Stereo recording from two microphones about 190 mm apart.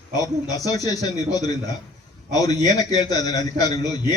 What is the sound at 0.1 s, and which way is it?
A man's voice, 20° left (ahead or behind).